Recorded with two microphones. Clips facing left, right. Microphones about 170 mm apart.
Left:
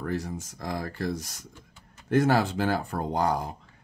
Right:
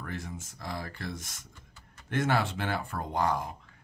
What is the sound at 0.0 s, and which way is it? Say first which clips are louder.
Speech: left 8 dB; 40° left (ahead or behind).